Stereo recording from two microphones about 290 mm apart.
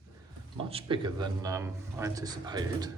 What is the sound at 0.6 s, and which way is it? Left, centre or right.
Speech, centre.